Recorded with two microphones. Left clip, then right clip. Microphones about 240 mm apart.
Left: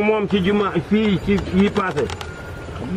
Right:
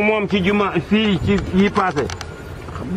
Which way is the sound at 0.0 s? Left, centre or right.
Centre.